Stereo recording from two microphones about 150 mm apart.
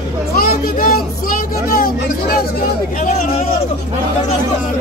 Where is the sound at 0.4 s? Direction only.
75° left (ahead or behind).